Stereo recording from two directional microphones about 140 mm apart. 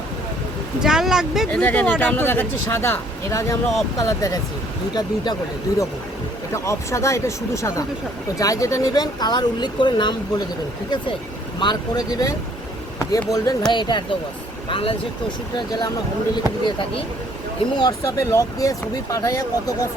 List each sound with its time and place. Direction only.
0.8 s speech: 5° right (ahead or behind)
1.5 s speech: 10° left (ahead or behind); by 14.9 s 40° left (ahead or behind)
15.5 s speech: 30° left (ahead or behind)